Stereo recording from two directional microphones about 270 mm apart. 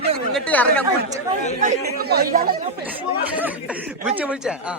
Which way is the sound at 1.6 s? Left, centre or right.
Right.